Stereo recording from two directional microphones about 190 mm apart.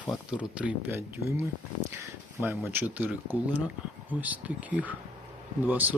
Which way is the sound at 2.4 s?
10° right (ahead or behind).